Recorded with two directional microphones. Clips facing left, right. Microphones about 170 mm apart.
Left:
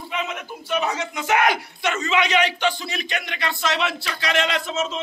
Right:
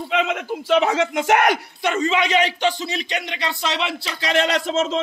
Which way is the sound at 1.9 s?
30° right (ahead or behind).